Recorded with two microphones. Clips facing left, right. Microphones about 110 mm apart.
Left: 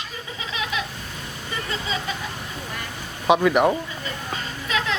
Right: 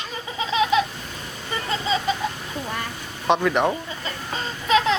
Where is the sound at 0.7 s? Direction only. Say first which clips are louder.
Right 9 dB; 25° right (ahead or behind).